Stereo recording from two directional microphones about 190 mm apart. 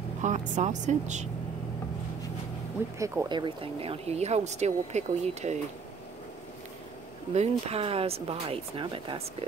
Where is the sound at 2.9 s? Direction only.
15° right (ahead or behind); by 5.5 s 35° right (ahead or behind).